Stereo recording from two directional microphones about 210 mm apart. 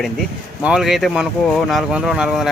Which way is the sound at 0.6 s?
5° right (ahead or behind).